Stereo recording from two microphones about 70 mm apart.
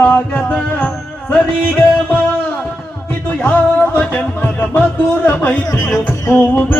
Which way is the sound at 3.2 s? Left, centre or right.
Left.